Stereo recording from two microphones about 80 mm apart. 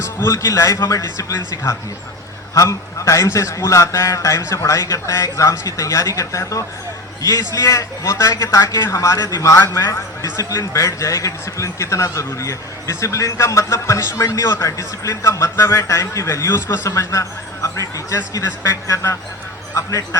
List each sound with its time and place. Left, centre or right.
0.3 s a man's voice: left